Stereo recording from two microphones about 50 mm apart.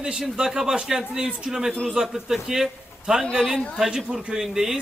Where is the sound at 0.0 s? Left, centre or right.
Centre.